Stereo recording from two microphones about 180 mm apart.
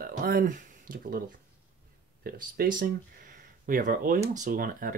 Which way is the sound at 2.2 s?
55° right (ahead or behind).